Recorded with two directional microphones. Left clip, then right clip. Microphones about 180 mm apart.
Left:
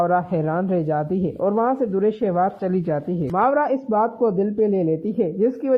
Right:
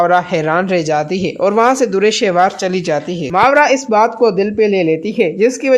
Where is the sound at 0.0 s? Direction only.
20° right (ahead or behind).